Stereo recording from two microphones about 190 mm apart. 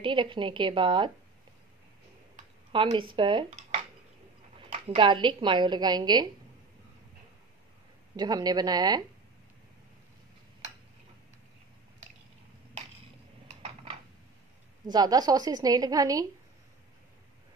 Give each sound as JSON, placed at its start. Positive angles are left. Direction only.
{"t": 0.0, "sound": "a woman's voice", "side_deg": -25}
{"t": 2.7, "sound": "a woman's voice", "side_deg": -25}
{"t": 8.2, "sound": "a woman's voice", "side_deg": -20}
{"t": 14.9, "sound": "a woman's voice", "side_deg": -20}